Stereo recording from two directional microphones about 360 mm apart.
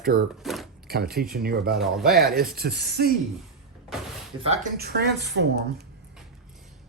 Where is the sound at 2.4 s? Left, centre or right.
Right.